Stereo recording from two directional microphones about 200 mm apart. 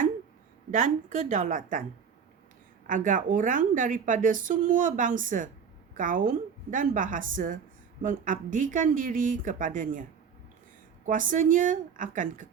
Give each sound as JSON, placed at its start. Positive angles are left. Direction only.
{"t": 0.7, "sound": "a woman's voice", "side_deg": -40}
{"t": 2.8, "sound": "a woman's voice", "side_deg": -40}